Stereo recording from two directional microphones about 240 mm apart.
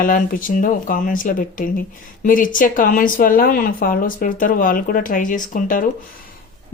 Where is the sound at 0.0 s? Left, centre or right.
Left.